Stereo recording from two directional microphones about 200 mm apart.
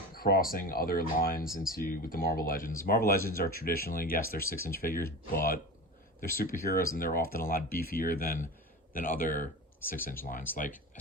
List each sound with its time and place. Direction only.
0.1 s speech: 45° left (ahead or behind)
10.5 s speech: 10° left (ahead or behind)